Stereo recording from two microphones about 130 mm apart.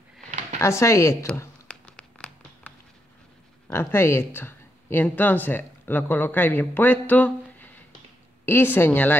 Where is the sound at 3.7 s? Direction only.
20° left (ahead or behind).